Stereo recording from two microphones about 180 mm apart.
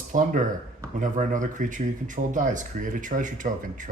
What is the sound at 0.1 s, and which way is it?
Speech, 45° right (ahead or behind).